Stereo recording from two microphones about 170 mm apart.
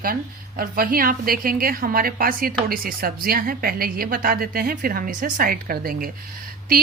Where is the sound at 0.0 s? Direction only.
55° right (ahead or behind).